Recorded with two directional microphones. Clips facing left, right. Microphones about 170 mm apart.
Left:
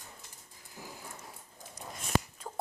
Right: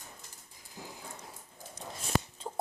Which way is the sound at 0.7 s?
20° right (ahead or behind).